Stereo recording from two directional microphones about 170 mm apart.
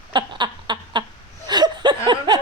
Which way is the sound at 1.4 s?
25° right (ahead or behind).